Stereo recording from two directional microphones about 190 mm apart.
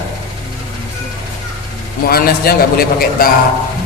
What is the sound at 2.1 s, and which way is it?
A man's voice, 50° left (ahead or behind).